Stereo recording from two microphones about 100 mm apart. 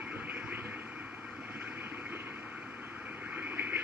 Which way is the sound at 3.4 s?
20° right (ahead or behind).